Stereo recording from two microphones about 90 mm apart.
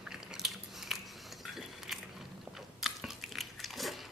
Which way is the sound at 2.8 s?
5° right (ahead or behind).